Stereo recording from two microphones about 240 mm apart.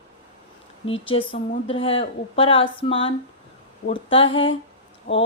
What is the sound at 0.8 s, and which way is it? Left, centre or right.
Speech, left.